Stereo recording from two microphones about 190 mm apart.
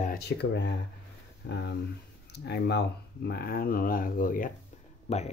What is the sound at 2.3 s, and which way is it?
Speech, 60° left (ahead or behind).